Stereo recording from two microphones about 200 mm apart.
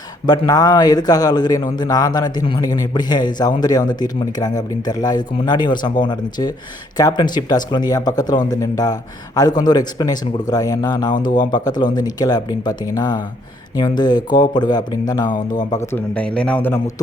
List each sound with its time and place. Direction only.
0.3 s a man's voice: 20° left (ahead or behind)
11.3 s speech: 40° left (ahead or behind)
11.6 s a man's voice: 20° left (ahead or behind)